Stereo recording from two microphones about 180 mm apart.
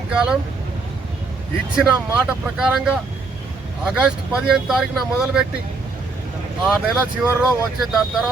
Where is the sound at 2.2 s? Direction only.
5° right (ahead or behind).